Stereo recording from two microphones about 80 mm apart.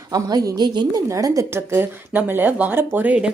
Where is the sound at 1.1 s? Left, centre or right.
Right.